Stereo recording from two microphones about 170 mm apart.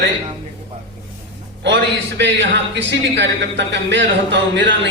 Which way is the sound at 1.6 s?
90° right.